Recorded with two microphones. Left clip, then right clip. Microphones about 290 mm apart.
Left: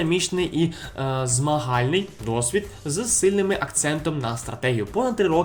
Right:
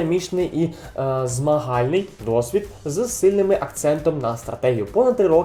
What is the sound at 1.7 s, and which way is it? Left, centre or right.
Speech, left.